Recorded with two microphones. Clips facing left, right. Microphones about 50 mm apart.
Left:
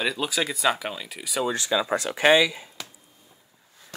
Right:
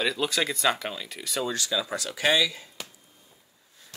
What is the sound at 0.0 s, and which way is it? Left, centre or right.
Speech, centre.